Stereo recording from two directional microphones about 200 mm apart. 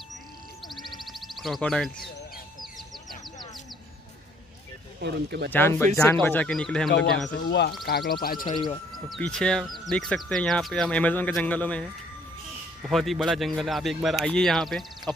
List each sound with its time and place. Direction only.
0.7 s music: centre (ahead or behind)
5.0 s speech: 55° right (ahead or behind)
5.5 s speech: 10° left (ahead or behind)
7.2 s speech: 60° left (ahead or behind)
8.5 s speech: 25° left (ahead or behind)
9.1 s speech: 5° left (ahead or behind)
12.8 s speech: centre (ahead or behind)